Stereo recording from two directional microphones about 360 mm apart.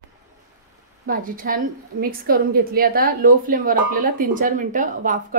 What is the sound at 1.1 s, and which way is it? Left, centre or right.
A woman's voice, right.